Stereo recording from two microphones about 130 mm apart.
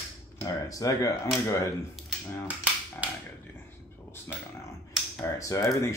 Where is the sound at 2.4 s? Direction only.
10° right (ahead or behind).